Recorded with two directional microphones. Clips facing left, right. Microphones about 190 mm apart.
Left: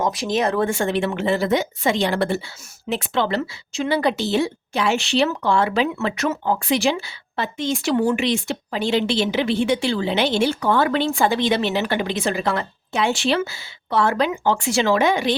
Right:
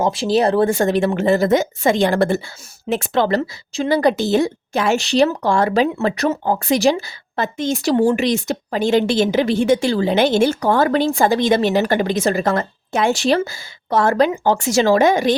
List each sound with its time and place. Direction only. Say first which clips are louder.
0.0 s a woman's voice: right 5 dB; 30° right (ahead or behind); by 15.4 s 45° right (ahead or behind)